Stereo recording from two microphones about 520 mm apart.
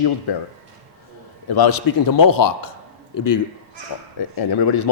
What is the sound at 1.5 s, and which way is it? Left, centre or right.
A man's voice, left.